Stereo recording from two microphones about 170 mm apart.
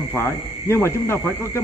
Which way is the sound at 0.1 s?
15° left (ahead or behind).